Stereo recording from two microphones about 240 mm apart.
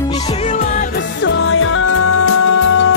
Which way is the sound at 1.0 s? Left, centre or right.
Left.